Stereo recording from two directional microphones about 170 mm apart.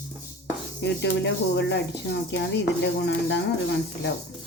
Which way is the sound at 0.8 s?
90° left.